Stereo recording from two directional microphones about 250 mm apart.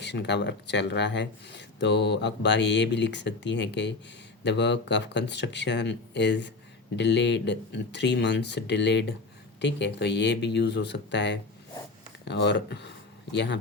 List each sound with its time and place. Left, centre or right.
0.0 s speech: left